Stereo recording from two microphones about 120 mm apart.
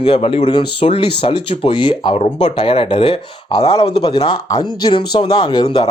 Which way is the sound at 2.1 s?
60° left (ahead or behind).